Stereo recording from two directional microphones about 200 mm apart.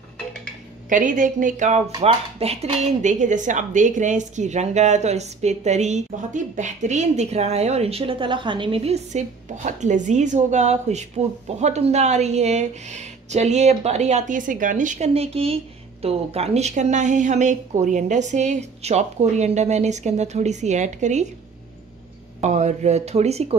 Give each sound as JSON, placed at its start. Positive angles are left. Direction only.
{"t": 0.8, "sound": "speech", "side_deg": -40}
{"t": 22.4, "sound": "speech", "side_deg": -35}